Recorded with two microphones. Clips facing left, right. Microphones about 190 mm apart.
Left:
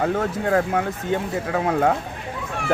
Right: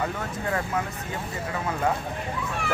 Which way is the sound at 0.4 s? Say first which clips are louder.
Left 6 dB; 70° left (ahead or behind).